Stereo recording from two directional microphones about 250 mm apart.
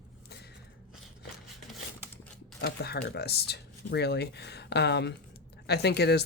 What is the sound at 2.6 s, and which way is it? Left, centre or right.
Speech, left.